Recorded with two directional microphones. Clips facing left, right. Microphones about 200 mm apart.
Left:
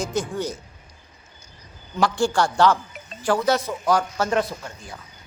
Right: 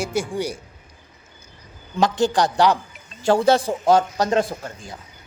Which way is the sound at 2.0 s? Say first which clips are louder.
Right 2 dB; 20° right (ahead or behind).